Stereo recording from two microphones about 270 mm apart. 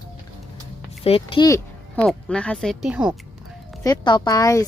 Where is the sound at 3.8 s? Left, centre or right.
Centre.